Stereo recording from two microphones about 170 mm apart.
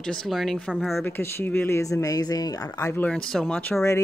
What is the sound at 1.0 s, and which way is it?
Speech, 15° left (ahead or behind).